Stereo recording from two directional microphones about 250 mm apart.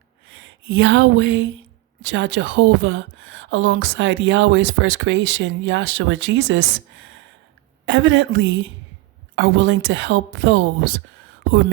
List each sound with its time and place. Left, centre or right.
0.3 s speech: right